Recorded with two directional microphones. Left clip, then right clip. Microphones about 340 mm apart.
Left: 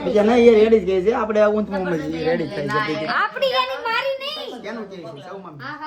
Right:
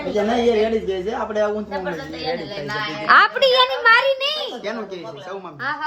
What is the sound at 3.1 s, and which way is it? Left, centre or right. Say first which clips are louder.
Speech: right 10 dB; right.